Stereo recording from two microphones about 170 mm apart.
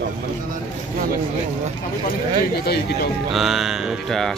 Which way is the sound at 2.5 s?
70° left (ahead or behind).